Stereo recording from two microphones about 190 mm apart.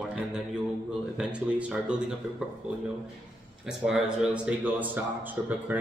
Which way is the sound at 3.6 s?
5° right (ahead or behind).